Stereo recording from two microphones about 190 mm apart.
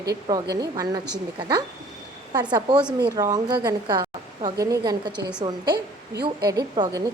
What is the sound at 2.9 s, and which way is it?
A woman's voice, 20° right (ahead or behind).